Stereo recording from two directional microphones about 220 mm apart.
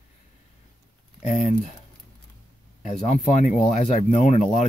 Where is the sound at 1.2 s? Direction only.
30° left (ahead or behind).